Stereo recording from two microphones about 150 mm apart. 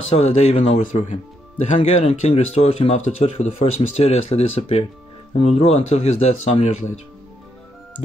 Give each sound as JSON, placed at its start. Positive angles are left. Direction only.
{"t": 0.1, "sound": "speech", "side_deg": 45}